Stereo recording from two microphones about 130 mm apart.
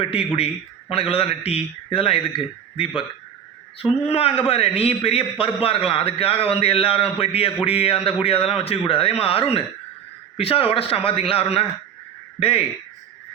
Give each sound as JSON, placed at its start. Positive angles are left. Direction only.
{"t": 0.0, "sound": "a man's voice", "side_deg": 45}